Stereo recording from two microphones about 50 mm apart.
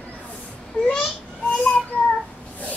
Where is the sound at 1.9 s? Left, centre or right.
Left.